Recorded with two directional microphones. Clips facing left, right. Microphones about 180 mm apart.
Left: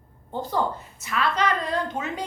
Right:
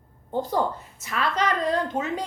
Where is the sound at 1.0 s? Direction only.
40° right (ahead or behind).